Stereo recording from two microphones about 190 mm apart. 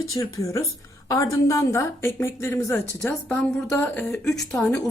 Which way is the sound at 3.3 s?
5° left (ahead or behind).